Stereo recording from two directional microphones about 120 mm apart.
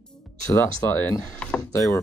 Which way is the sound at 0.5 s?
25° left (ahead or behind).